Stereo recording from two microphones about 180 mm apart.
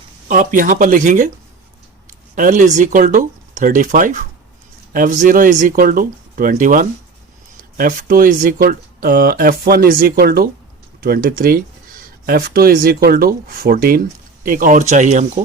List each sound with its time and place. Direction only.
0.3 s speech: 45° right (ahead or behind)
2.3 s speech: 45° right (ahead or behind)